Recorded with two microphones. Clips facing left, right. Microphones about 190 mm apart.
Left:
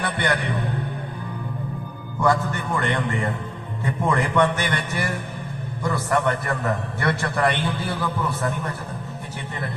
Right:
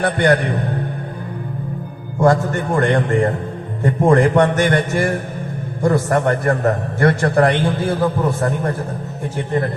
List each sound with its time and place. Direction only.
0.0 s a man's voice: 45° right (ahead or behind)
2.2 s a man's voice: 45° right (ahead or behind)